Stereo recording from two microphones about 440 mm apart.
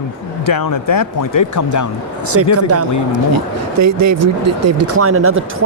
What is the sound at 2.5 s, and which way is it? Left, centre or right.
Speech, right.